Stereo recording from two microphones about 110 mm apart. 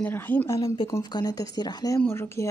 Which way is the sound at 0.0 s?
15° left (ahead or behind).